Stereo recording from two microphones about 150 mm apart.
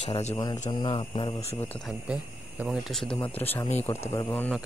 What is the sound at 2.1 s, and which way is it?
Speech, 5° right (ahead or behind).